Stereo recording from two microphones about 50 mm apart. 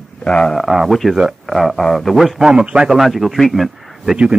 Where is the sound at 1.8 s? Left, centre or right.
Centre.